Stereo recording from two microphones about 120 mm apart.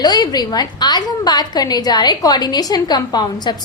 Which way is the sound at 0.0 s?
35° left (ahead or behind).